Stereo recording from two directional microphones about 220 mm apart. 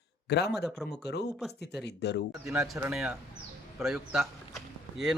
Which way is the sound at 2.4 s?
Centre (ahead or behind).